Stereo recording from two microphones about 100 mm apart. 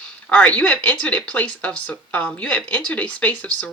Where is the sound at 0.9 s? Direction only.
15° left (ahead or behind).